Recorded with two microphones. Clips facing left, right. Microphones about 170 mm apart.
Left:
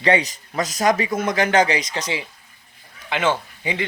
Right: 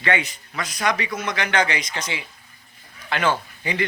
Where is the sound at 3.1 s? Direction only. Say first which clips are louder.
Left 1 dB; 20° left (ahead or behind).